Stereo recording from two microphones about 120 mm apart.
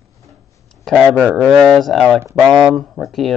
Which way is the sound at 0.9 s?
5° left (ahead or behind).